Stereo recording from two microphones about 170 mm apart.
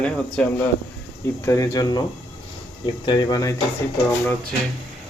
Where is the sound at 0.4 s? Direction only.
5° left (ahead or behind).